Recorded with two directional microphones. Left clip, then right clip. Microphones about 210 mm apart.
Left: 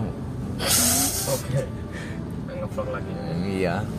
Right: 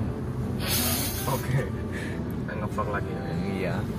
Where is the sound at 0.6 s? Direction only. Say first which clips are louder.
Left 6 dB; 40° left (ahead or behind).